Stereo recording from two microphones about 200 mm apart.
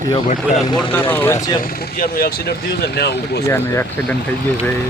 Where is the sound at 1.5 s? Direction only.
45° left (ahead or behind).